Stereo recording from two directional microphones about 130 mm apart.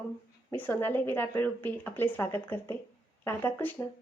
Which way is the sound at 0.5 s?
15° left (ahead or behind).